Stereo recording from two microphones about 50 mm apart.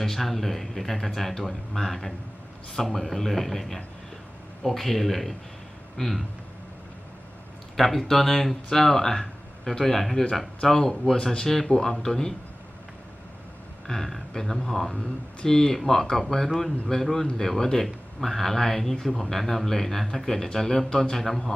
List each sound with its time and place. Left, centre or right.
0.0 s speech: centre
7.8 s speech: centre
13.8 s speech: centre